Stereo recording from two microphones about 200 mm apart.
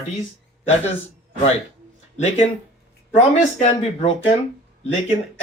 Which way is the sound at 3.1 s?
35° left (ahead or behind).